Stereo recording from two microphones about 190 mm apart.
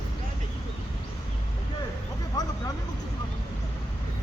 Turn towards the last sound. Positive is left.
turn(degrees=20)  # may be behind; listen again after turning